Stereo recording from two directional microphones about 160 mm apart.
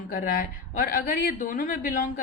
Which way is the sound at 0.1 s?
55° left (ahead or behind).